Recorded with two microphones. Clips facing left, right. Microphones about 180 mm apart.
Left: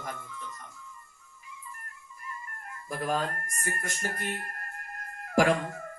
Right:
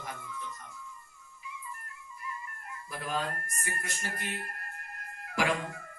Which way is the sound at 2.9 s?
45° left (ahead or behind).